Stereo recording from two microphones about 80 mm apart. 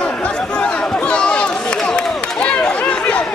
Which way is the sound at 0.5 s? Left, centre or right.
Centre.